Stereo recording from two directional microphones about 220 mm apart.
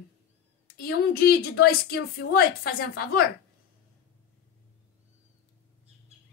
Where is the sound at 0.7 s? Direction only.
45° left (ahead or behind).